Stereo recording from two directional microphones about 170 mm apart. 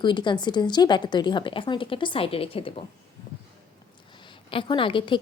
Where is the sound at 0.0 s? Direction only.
25° left (ahead or behind).